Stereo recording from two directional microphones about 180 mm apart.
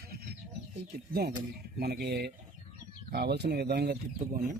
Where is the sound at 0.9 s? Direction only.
60° right (ahead or behind).